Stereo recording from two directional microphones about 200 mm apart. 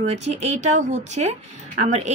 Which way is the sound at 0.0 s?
35° right (ahead or behind).